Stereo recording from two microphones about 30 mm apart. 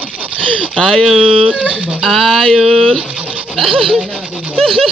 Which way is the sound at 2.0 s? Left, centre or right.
Centre.